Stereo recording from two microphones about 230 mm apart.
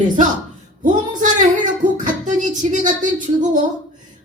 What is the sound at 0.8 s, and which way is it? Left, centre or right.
Speech, right.